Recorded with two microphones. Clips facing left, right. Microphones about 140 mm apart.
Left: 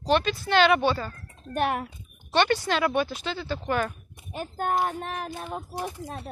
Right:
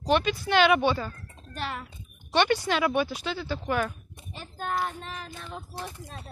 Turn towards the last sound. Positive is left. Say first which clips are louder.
# left 6 dB
turn(degrees=50)  # may be behind; listen again after turning